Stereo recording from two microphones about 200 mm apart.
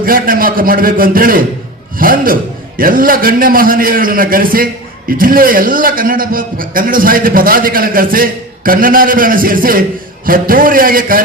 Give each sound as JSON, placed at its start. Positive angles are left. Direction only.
{"t": 0.0, "sound": "a man's voice", "side_deg": -45}